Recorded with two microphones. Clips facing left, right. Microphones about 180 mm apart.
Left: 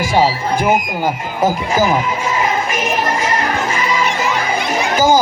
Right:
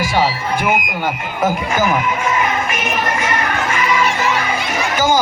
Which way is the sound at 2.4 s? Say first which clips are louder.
Left 2 dB; 35° left (ahead or behind).